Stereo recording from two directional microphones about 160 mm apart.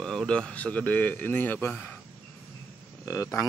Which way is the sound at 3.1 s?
20° left (ahead or behind).